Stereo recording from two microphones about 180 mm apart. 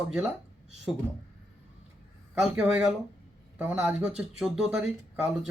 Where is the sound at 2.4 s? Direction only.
5° right (ahead or behind).